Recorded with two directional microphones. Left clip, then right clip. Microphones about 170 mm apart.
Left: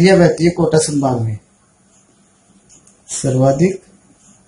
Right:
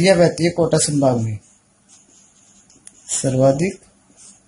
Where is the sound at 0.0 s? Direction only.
45° right (ahead or behind).